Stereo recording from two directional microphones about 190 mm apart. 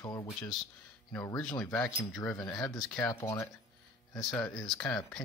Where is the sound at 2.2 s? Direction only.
20° left (ahead or behind).